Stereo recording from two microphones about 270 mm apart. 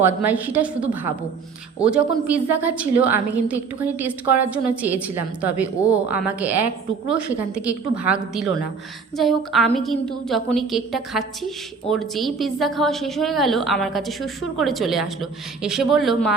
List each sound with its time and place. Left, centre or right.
0.0 s a woman's voice: centre